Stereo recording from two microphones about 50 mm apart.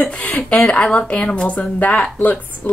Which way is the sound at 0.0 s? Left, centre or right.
Left.